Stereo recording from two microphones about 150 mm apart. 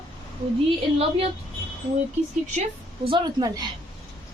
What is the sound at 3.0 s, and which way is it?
Speech, 30° right (ahead or behind).